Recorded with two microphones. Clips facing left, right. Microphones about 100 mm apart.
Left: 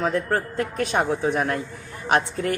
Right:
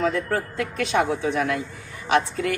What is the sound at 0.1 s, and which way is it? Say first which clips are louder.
Speech: left 1 dB; 45° left (ahead or behind).